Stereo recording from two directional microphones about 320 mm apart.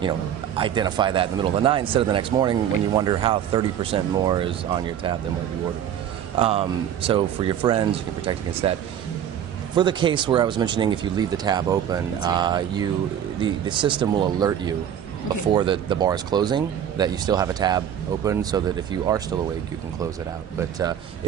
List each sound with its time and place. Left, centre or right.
0.6 s speech: centre
6.3 s speech: centre
9.8 s speech: centre
15.5 s speech: centre